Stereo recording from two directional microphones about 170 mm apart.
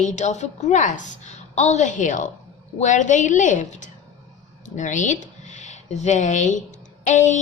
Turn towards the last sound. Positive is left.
turn(degrees=45)  # may be behind; listen again after turning